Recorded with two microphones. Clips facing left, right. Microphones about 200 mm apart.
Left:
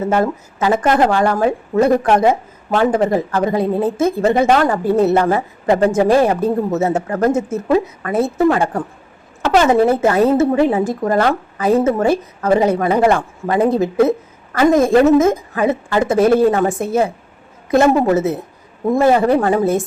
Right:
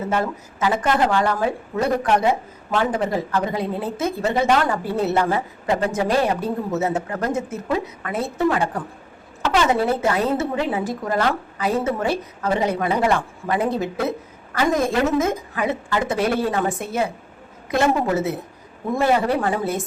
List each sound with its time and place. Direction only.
0.1 s a woman's voice: 45° left (ahead or behind)